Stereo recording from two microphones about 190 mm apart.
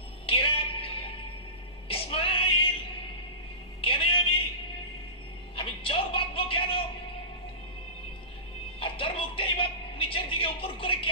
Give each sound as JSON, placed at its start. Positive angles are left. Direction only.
{"t": 0.3, "sound": "music", "side_deg": 30}
{"t": 3.8, "sound": "music", "side_deg": 30}
{"t": 5.6, "sound": "music", "side_deg": 30}
{"t": 8.7, "sound": "music", "side_deg": 30}